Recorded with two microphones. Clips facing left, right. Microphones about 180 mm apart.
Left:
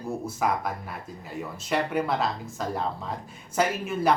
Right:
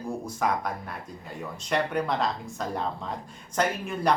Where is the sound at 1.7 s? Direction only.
5° left (ahead or behind).